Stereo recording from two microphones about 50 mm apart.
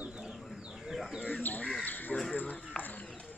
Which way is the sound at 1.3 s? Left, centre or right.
Left.